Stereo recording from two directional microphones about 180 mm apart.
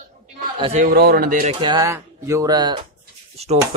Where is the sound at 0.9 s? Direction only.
60° right (ahead or behind).